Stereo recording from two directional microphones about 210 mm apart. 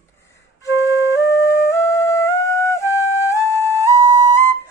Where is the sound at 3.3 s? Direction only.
15° right (ahead or behind).